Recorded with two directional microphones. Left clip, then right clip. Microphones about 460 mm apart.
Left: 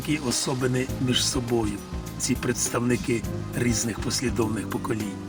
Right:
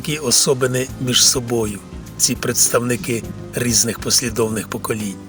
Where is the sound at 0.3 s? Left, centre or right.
Right.